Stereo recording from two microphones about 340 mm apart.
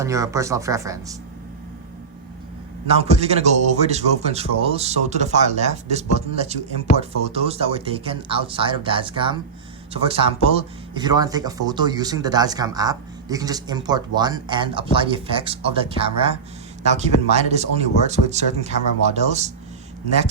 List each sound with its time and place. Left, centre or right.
0.0 s speech: centre
2.9 s a man's voice: centre